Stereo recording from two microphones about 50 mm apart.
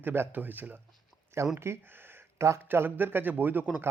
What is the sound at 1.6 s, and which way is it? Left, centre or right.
Speech, right.